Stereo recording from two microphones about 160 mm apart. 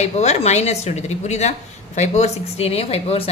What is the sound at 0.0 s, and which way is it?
A woman's voice, 45° left (ahead or behind).